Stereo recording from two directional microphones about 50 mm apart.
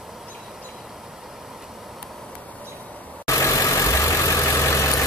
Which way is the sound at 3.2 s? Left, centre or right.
Left.